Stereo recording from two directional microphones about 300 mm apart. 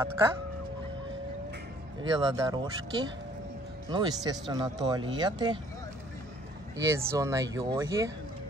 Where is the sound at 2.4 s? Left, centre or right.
Centre.